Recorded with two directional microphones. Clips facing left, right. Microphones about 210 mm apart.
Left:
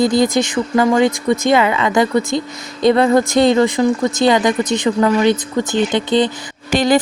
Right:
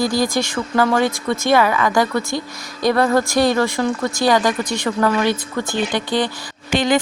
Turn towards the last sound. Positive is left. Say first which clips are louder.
# left 3 dB
turn(degrees=40)  # may be behind; listen again after turning